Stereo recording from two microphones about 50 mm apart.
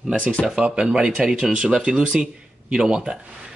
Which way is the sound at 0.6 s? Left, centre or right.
Centre.